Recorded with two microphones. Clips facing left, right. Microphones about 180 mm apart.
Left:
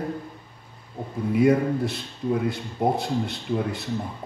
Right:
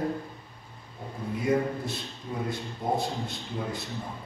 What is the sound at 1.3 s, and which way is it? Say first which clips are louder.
Speech: left 7 dB; 70° left (ahead or behind).